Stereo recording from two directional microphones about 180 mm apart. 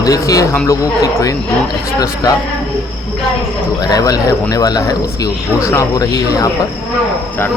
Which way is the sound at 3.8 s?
20° left (ahead or behind).